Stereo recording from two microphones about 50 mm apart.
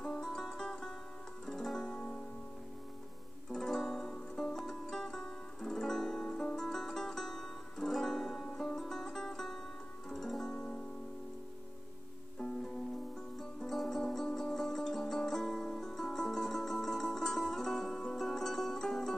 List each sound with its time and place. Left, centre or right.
0.6 s music: centre
3.5 s music: centre
12.4 s music: centre
13.6 s music: centre